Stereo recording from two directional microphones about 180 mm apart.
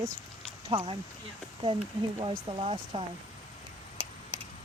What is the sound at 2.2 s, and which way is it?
Speech, 30° right (ahead or behind).